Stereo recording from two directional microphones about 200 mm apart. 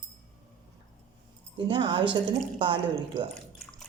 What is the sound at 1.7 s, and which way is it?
Speech, 25° right (ahead or behind).